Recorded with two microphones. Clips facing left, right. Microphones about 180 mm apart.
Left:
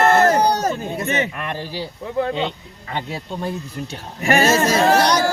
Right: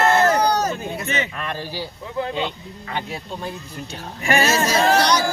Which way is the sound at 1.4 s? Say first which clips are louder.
Left 1 dB; 20° left (ahead or behind).